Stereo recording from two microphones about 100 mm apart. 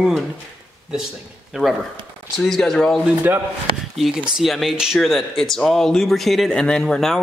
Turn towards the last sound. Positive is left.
turn(degrees=5)  # may be behind; listen again after turning